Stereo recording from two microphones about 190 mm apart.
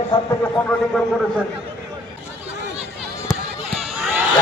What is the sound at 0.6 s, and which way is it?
Speech, 5° left (ahead or behind).